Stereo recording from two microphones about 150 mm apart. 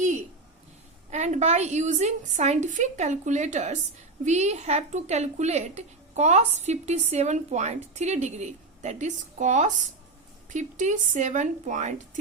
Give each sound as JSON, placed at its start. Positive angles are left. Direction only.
{"t": 1.1, "sound": "a woman's voice", "side_deg": -50}